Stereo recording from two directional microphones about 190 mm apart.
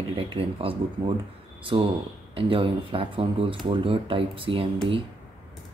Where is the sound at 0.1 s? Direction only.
30° right (ahead or behind).